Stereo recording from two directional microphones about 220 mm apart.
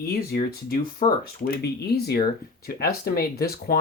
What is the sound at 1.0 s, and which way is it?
Speech, 25° left (ahead or behind).